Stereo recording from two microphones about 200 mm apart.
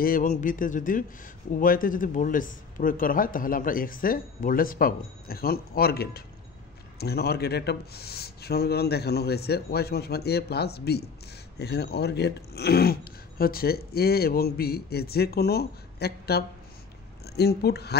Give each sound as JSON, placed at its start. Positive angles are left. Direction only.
{"t": 0.0, "sound": "speech", "side_deg": 45}